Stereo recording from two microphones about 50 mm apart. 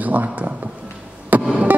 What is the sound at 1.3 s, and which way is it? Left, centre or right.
Music, right.